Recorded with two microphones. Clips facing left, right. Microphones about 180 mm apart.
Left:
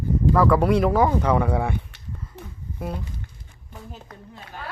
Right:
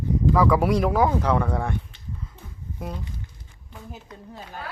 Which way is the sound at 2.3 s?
75° left (ahead or behind).